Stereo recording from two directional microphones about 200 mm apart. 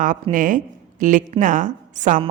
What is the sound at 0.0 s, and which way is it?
A woman's voice, 40° right (ahead or behind).